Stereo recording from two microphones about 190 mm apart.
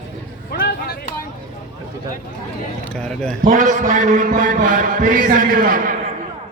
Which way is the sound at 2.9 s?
5° left (ahead or behind).